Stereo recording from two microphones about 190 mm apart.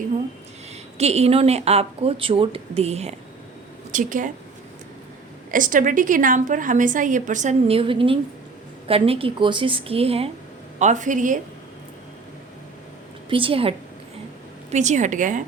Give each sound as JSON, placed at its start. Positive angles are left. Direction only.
{"t": 0.9, "sound": "a woman's voice", "side_deg": -35}
{"t": 5.5, "sound": "a woman's voice", "side_deg": -45}
{"t": 13.3, "sound": "a woman's voice", "side_deg": -30}